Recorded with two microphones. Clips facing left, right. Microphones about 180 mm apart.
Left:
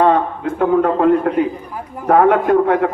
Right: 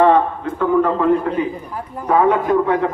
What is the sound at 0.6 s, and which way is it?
A man's voice, 60° left (ahead or behind).